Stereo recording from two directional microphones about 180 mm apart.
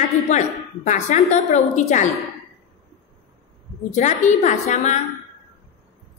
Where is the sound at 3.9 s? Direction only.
40° left (ahead or behind).